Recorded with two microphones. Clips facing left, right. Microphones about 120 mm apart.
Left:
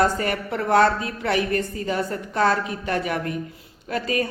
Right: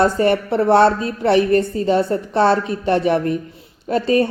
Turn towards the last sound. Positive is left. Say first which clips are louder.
# right 8 dB
turn(degrees=-30)  # may be behind; listen again after turning